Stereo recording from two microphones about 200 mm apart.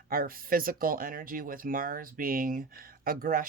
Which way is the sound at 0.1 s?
45° right (ahead or behind).